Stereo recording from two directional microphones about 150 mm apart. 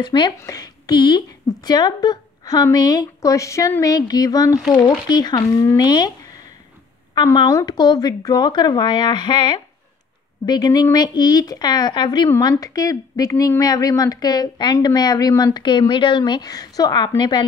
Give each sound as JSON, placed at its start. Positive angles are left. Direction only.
{"t": 0.0, "sound": "a woman's voice", "side_deg": 30}
{"t": 7.2, "sound": "a woman's voice", "side_deg": 25}